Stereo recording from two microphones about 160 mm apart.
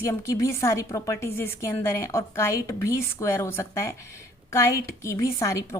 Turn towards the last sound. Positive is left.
turn(degrees=20)  # may be behind; listen again after turning